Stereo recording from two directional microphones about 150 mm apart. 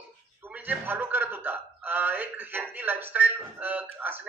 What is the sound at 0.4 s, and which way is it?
Speech, 10° right (ahead or behind).